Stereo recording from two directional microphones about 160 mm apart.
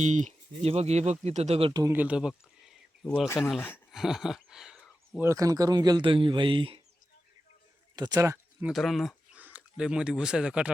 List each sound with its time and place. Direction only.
0.0 s speech: 50° right (ahead or behind)
1.8 s a sound: 10° right (ahead or behind)
3.2 s speech: 15° left (ahead or behind)
3.9 s a sound: centre (ahead or behind)
5.2 s a man's voice: 20° right (ahead or behind)
7.9 s a man's voice: 25° right (ahead or behind)
8.6 s speech: centre (ahead or behind)